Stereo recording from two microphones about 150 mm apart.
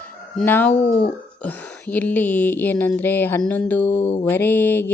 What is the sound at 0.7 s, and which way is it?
Speech, 50° left (ahead or behind).